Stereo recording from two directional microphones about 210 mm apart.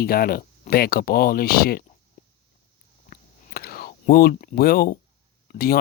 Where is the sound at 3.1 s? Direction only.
45° left (ahead or behind).